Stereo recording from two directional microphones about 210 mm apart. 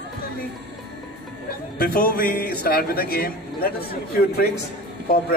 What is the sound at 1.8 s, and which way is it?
A man's voice, 45° left (ahead or behind).